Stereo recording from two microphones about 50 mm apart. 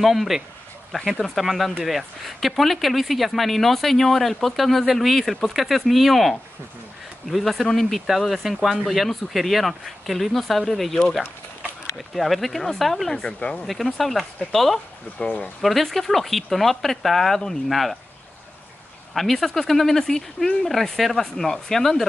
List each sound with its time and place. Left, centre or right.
0.0 s speech: centre
13.2 s speech: centre
13.9 s speech: centre
15.1 s speech: left
15.6 s speech: centre
19.1 s speech: centre